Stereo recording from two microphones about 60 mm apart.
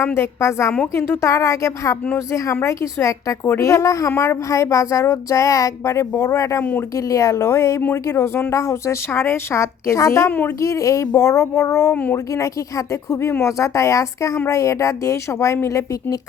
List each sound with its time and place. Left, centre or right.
0.0 s a woman's voice: left
10.2 s a woman's voice: left
10.6 s speech: left
15.6 s speech: left